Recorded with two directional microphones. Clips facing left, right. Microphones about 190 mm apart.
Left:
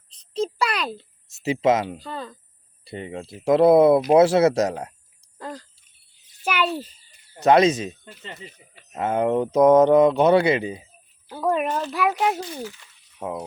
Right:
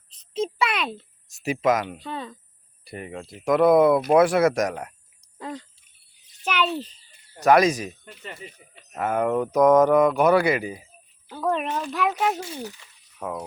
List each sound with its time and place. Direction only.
0.3 s a child's voice: centre (ahead or behind)
0.9 s speech: 25° left (ahead or behind)
2.0 s a child's voice: centre (ahead or behind)
2.8 s speech: 25° left (ahead or behind)
5.4 s a sound: centre (ahead or behind)
6.2 s a child's voice: 10° left (ahead or behind)
7.3 s speech: 25° left (ahead or behind)
11.3 s a child's voice: 10° left (ahead or behind)
13.1 s speech: 20° left (ahead or behind)